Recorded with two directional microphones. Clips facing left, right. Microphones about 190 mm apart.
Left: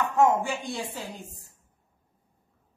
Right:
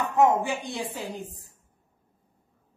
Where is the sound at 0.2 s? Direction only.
20° right (ahead or behind).